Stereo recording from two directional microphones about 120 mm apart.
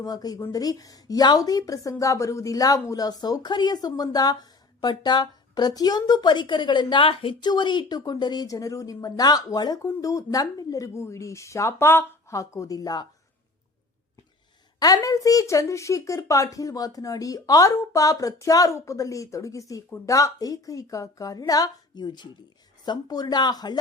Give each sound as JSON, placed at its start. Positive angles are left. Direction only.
{"t": 0.0, "sound": "a woman's voice", "side_deg": 30}
{"t": 14.8, "sound": "a woman's voice", "side_deg": 30}